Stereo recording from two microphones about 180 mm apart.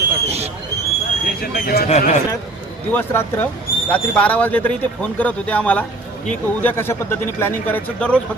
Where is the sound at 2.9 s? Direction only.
10° left (ahead or behind).